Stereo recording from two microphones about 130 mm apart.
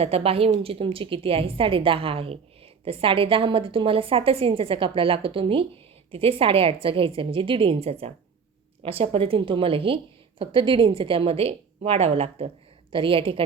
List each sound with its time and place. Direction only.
0.0 s a woman's voice: 50° right (ahead or behind)